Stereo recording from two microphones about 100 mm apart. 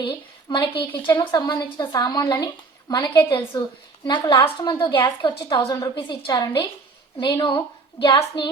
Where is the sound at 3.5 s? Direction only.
45° left (ahead or behind).